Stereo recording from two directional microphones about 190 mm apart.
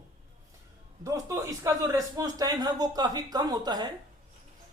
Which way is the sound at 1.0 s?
15° right (ahead or behind).